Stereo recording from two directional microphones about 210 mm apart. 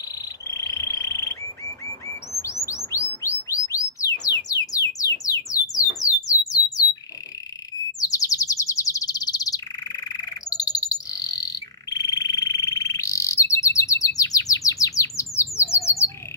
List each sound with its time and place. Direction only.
0.5 s frog: 15° left (ahead or behind)
2.4 s bird: 15° left (ahead or behind)
4.5 s music: 15° left (ahead or behind)
8.0 s bird: 15° left (ahead or behind)